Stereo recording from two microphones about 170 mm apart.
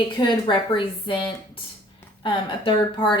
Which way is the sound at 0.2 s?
30° left (ahead or behind).